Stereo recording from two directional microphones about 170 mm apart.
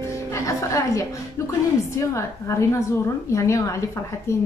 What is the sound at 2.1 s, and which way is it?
A woman's voice, 15° left (ahead or behind).